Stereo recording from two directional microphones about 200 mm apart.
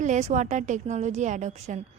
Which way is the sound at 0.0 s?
35° right (ahead or behind).